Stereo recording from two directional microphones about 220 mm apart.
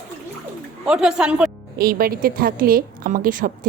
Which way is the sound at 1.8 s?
40° right (ahead or behind).